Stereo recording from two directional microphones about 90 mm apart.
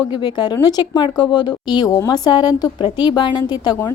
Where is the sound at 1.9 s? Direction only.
45° left (ahead or behind).